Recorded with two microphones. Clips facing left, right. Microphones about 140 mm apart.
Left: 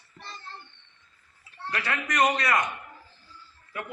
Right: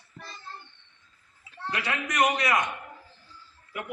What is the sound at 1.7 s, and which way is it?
Speech, 15° right (ahead or behind).